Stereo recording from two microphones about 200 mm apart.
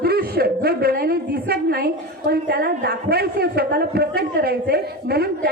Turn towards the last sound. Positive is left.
turn(degrees=-50)  # may be behind; listen again after turning